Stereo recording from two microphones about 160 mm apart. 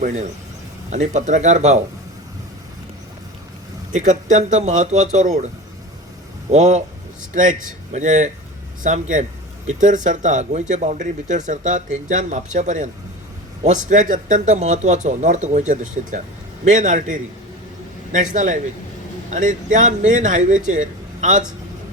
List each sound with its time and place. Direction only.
0.0 s speech: 45° right (ahead or behind)
3.9 s speech: 50° right (ahead or behind)
6.5 s speech: 45° right (ahead or behind)
7.9 s a man's voice: 50° right (ahead or behind)